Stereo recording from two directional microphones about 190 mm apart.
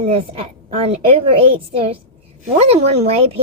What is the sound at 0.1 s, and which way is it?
Speech, 30° right (ahead or behind).